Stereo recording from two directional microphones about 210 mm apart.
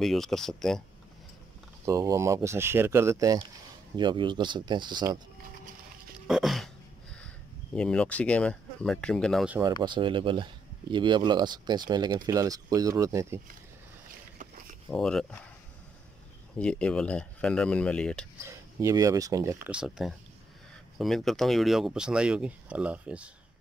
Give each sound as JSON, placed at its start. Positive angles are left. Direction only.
{"t": 0.0, "sound": "speech", "side_deg": 0}
{"t": 1.9, "sound": "speech", "side_deg": -15}
{"t": 6.2, "sound": "throat clearing", "side_deg": 0}
{"t": 7.7, "sound": "speech", "side_deg": 5}
{"t": 9.8, "sound": "speech", "side_deg": -25}
{"t": 14.9, "sound": "speech", "side_deg": 0}
{"t": 16.5, "sound": "speech", "side_deg": 5}
{"t": 18.5, "sound": "speech", "side_deg": -15}